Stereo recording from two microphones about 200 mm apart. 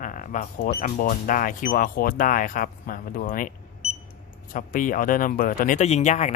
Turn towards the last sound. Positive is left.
turn(degrees=35)  # may be behind; listen again after turning